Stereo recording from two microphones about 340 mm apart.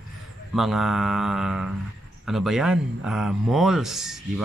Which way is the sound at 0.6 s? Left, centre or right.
Centre.